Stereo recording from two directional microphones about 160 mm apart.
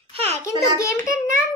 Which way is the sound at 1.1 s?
60° right (ahead or behind).